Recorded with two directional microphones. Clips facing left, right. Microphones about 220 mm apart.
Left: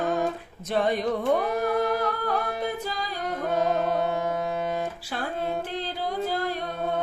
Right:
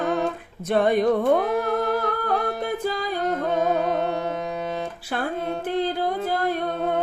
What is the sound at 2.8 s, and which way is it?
Music, 55° right (ahead or behind).